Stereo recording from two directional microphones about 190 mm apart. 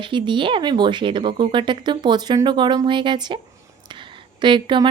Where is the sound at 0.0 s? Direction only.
25° right (ahead or behind).